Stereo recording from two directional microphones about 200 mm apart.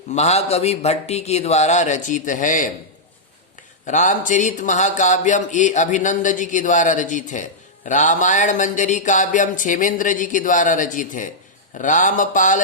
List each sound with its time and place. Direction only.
0.1 s speech: 35° left (ahead or behind)
3.8 s speech: 40° left (ahead or behind)